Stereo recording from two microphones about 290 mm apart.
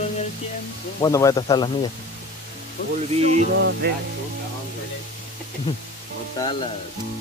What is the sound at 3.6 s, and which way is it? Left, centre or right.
Speech, right.